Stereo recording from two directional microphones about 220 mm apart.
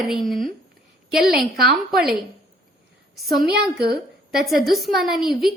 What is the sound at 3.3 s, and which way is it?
Speech, 45° right (ahead or behind).